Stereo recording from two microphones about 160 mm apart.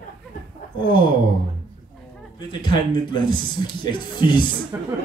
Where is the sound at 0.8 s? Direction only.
30° left (ahead or behind).